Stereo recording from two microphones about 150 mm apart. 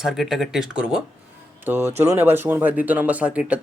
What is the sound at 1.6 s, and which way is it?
Speech, 15° right (ahead or behind).